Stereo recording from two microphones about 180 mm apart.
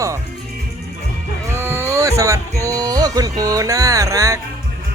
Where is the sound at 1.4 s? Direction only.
15° right (ahead or behind).